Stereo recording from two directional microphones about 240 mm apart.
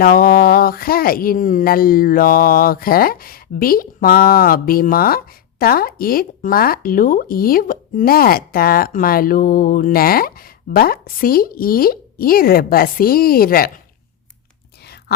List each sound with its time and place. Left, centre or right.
0.0 s speech: left